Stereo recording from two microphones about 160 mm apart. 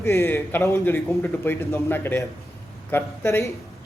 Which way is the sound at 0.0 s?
15° left (ahead or behind).